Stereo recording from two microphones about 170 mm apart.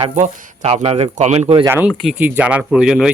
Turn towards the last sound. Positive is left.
turn(degrees=-5)  # may be behind; listen again after turning